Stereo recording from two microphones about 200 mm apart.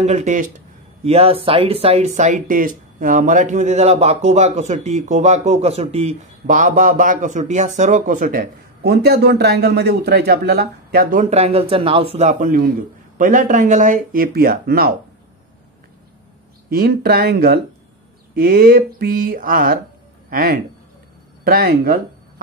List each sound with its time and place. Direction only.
0.0 s speech: 35° right (ahead or behind)
16.6 s speech: 50° right (ahead or behind)